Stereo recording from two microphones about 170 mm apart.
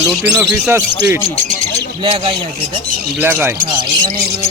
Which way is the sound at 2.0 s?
30° right (ahead or behind).